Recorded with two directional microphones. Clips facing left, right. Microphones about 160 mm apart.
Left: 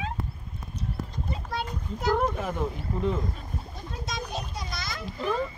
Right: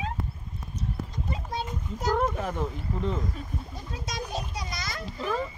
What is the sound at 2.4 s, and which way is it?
Speech, 5° left (ahead or behind).